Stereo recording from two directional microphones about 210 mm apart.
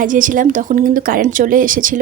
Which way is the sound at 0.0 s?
40° right (ahead or behind).